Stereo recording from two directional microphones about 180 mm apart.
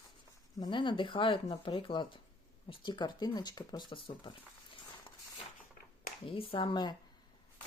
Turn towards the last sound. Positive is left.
turn(degrees=25)  # may be behind; listen again after turning